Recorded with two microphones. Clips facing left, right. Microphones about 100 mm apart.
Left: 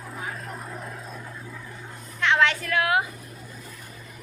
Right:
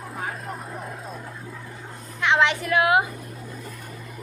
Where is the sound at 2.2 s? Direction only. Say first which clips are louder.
Right 1 dB; 15° right (ahead or behind).